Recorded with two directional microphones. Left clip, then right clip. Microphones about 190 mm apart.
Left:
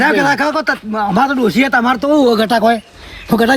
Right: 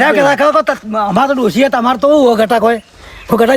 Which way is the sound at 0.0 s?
50° right (ahead or behind).